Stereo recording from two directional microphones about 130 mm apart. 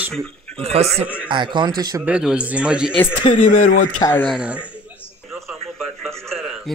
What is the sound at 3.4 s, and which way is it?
Speech, 75° left (ahead or behind).